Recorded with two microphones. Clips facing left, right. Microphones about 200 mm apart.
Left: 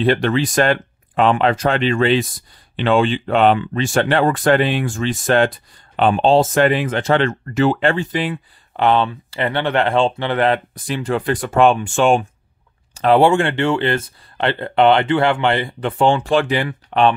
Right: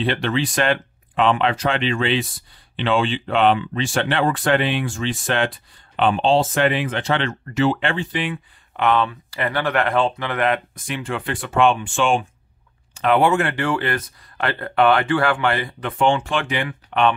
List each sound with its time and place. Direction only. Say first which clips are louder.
0.0 s speech: left 5 dB; 45° left (ahead or behind)